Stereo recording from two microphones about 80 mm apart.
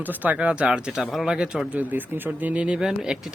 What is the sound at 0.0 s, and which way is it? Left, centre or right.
Speech, right.